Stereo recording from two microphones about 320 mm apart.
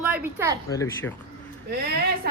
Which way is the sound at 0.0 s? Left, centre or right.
Centre.